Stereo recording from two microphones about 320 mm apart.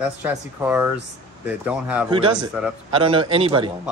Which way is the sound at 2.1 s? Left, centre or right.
Centre.